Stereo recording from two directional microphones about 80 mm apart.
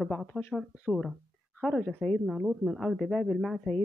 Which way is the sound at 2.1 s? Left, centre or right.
Centre.